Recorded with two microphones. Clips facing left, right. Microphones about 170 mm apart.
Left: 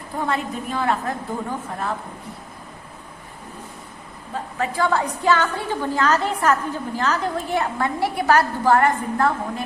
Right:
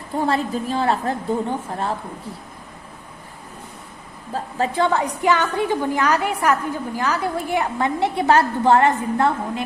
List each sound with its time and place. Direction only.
0.2 s a woman's voice: 30° right (ahead or behind)
4.5 s a woman's voice: 25° right (ahead or behind)